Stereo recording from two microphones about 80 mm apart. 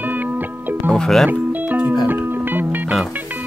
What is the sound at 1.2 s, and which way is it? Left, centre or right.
Music, right.